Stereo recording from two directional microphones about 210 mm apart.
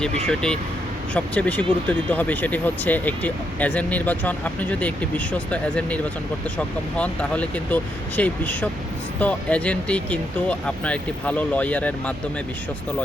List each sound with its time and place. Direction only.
0.3 s speech: 5° left (ahead or behind)